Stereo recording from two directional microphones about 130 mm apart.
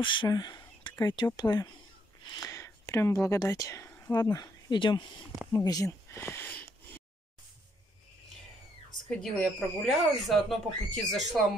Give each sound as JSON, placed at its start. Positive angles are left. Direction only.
{"t": 0.0, "sound": "speech", "side_deg": 40}
{"t": 2.2, "sound": "a sound", "side_deg": 30}
{"t": 4.1, "sound": "speech", "side_deg": 30}
{"t": 9.1, "sound": "speech", "side_deg": 0}